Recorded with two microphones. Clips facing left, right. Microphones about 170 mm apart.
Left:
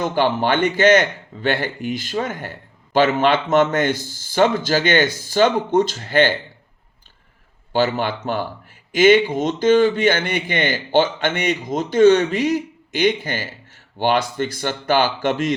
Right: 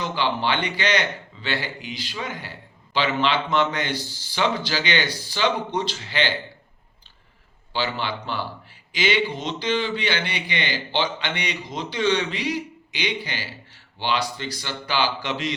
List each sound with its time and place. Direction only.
0.0 s speech: 50° left (ahead or behind)
7.7 s speech: 50° left (ahead or behind)